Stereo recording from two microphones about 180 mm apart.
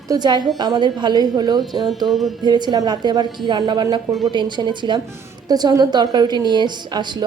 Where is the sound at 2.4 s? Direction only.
25° right (ahead or behind).